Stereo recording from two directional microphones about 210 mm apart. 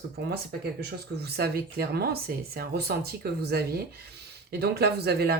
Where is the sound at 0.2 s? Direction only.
50° right (ahead or behind).